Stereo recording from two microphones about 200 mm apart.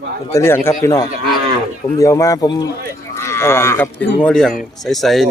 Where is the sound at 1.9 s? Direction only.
15° left (ahead or behind); by 5.3 s centre (ahead or behind).